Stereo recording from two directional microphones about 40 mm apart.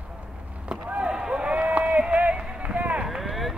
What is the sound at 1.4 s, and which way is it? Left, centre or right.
Run, right.